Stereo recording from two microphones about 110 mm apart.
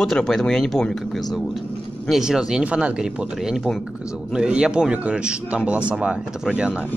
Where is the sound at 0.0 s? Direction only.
5° left (ahead or behind).